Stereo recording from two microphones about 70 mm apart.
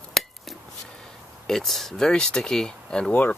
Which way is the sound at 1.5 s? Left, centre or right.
Centre.